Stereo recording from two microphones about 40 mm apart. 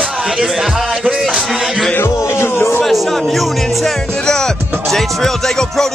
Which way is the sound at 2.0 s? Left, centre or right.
Left.